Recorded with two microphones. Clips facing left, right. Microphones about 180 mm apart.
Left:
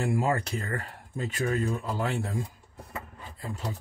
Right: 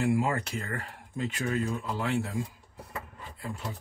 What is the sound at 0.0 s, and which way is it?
Speech, 40° left (ahead or behind).